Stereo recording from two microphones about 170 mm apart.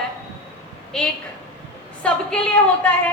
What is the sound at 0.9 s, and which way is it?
A woman's voice, 5° left (ahead or behind).